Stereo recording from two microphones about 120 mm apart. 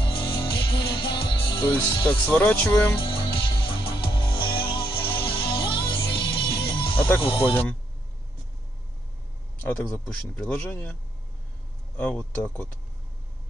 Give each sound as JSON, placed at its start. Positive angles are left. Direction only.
{"t": 0.0, "sound": "music", "side_deg": 45}
{"t": 2.0, "sound": "speech", "side_deg": 10}
{"t": 3.0, "sound": "music", "side_deg": 45}
{"t": 7.2, "sound": "speech", "side_deg": 50}
{"t": 9.6, "sound": "speech", "side_deg": 10}
{"t": 12.0, "sound": "speech", "side_deg": 10}